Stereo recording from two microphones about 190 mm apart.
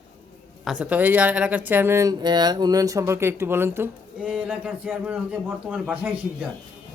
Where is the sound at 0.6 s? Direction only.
5° right (ahead or behind).